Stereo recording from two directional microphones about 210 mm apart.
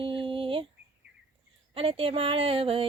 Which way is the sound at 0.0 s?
25° right (ahead or behind).